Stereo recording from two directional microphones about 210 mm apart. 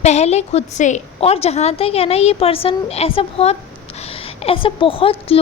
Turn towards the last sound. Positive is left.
turn(degrees=25)  # may be behind; listen again after turning